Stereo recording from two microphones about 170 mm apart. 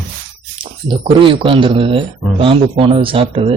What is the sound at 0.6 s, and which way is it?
Speech, 30° right (ahead or behind).